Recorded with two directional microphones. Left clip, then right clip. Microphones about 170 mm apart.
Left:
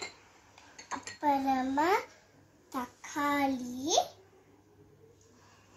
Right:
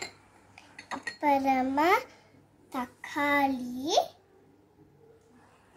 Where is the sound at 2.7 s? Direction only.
15° right (ahead or behind).